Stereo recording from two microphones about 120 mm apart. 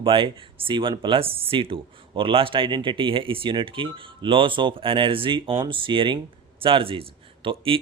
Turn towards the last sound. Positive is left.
turn(degrees=-45)  # may be behind; listen again after turning